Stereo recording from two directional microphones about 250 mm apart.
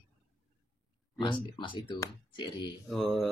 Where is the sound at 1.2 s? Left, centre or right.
Centre.